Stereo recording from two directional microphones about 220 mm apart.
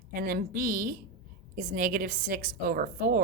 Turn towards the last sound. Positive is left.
turn(degrees=-40)  # may be behind; listen again after turning